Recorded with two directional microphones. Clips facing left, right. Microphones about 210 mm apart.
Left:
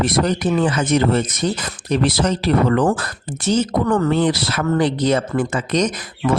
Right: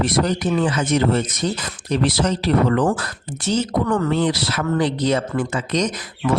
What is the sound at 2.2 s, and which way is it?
Speech, 55° left (ahead or behind).